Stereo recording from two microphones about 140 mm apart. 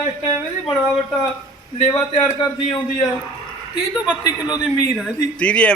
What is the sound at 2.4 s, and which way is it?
Speech, 30° left (ahead or behind).